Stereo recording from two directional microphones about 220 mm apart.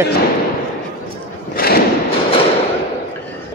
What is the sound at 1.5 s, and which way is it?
Thump, 45° left (ahead or behind).